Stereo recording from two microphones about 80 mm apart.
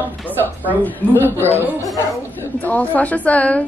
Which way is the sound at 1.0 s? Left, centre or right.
Left.